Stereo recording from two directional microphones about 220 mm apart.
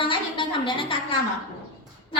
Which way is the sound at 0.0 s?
20° left (ahead or behind).